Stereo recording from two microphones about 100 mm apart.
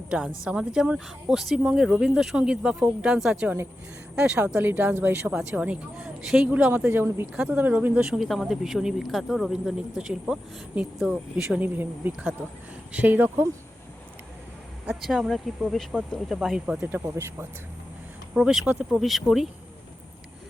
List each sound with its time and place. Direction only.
0.4 s speech: 10° right (ahead or behind)
3.4 s speech: 15° right (ahead or behind)
11.6 s speech: 15° right (ahead or behind)
14.8 s speech: 5° right (ahead or behind)
17.0 s speech: 25° right (ahead or behind)
18.3 s speech: 5° right (ahead or behind)
18.6 s speech: 15° right (ahead or behind)
18.9 s speech: centre (ahead or behind)